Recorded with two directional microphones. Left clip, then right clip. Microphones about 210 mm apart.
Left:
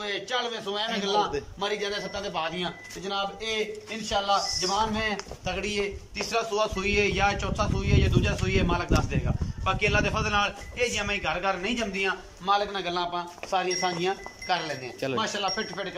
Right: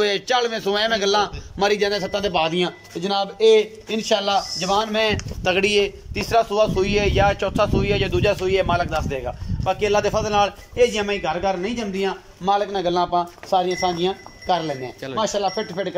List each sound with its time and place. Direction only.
0.0 s a man's voice: 50° right (ahead or behind); by 15.9 s 30° right (ahead or behind)